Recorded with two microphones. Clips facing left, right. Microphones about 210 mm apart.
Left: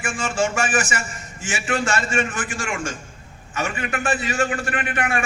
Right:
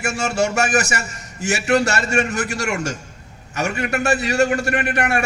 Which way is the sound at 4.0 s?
70° right (ahead or behind).